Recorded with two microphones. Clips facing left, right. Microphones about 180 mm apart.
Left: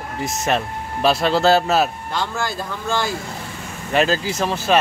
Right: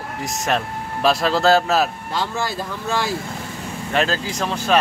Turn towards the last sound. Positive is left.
turn(degrees=5)  # may be behind; listen again after turning